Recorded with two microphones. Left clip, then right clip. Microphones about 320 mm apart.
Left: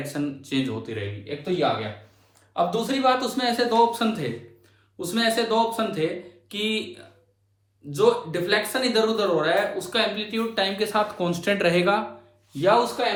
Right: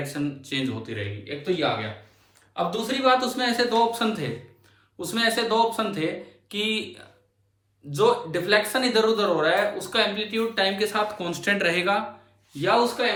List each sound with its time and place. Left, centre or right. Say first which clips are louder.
0.0 s a man's voice: even; centre